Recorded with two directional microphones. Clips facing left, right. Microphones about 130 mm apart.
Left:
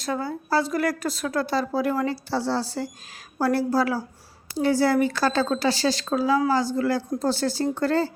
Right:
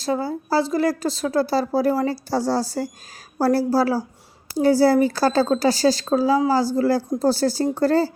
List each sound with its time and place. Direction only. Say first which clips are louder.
0.0 s a woman's voice: right 4 dB; 30° right (ahead or behind)